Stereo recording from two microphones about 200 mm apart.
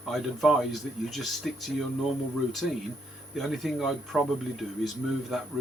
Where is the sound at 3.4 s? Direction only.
Centre (ahead or behind).